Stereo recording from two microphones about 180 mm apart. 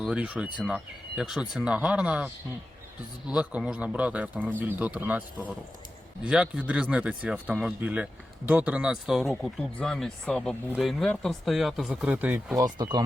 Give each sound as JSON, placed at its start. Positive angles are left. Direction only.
{"t": 0.0, "sound": "speech", "side_deg": -5}
{"t": 12.5, "sound": "speech", "side_deg": -20}